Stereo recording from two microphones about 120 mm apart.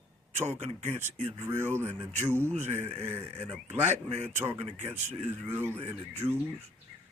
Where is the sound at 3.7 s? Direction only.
65° right (ahead or behind).